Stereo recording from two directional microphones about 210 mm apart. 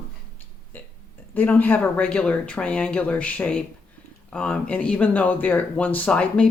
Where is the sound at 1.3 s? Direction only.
10° left (ahead or behind).